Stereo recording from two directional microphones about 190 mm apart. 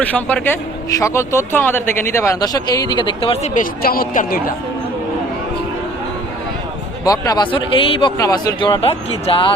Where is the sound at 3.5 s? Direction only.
50° left (ahead or behind).